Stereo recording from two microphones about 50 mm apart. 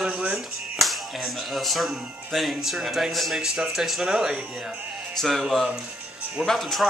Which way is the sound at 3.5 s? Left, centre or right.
Centre.